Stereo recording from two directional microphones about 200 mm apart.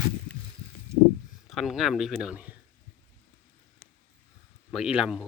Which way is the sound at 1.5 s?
Centre (ahead or behind).